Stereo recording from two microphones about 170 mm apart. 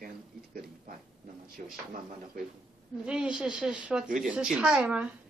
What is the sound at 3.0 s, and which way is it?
Speech, 5° right (ahead or behind).